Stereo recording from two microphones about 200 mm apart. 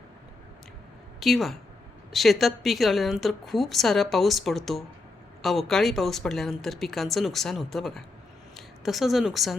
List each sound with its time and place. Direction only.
1.2 s a woman's voice: centre (ahead or behind)